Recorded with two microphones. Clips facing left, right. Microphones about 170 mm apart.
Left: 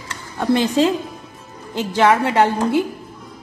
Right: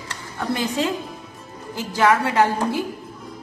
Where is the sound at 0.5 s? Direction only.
25° left (ahead or behind).